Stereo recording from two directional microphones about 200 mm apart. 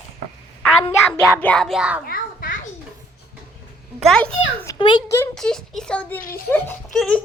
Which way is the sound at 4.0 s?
5° left (ahead or behind).